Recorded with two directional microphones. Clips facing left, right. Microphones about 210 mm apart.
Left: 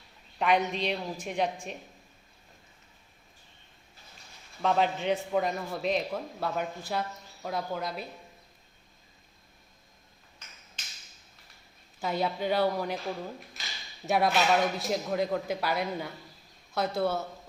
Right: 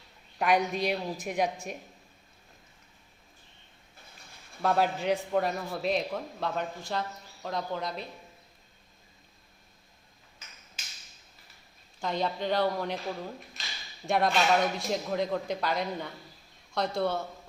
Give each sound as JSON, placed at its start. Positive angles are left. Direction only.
{"t": 0.3, "sound": "a woman's voice", "side_deg": -10}
{"t": 4.6, "sound": "a man's voice", "side_deg": -5}
{"t": 11.9, "sound": "a man's voice", "side_deg": 5}